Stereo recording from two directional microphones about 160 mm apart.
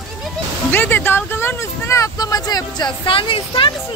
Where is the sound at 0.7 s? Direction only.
10° left (ahead or behind).